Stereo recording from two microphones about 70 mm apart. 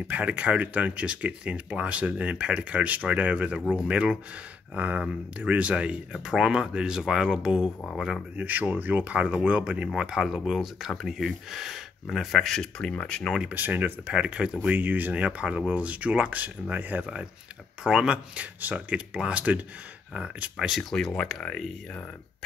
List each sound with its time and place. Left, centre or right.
0.1 s speech: right
8.4 s speech: right; by 13.3 s centre
13.4 s speech: right
14.6 s speech: right
20.5 s speech: centre
20.9 s speech: centre